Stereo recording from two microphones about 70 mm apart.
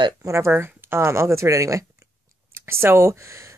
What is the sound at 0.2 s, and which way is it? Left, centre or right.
Speech, right.